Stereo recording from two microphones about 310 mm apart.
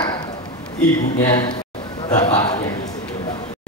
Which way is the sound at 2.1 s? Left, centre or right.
Left.